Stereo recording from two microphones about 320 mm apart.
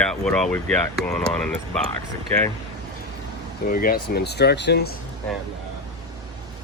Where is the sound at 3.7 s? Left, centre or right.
Left.